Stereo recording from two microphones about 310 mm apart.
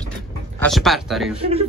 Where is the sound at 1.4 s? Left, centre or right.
Centre.